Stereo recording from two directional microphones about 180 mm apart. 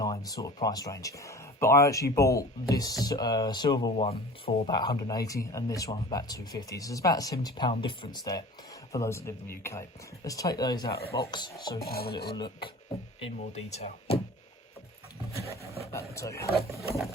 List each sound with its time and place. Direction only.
0.0 s a man's voice: 20° left (ahead or behind)
11.8 s filing: 60° left (ahead or behind)
12.3 s speech: 25° left (ahead or behind)
13.2 s speech: 40° left (ahead or behind)
15.9 s a man's voice: 15° left (ahead or behind)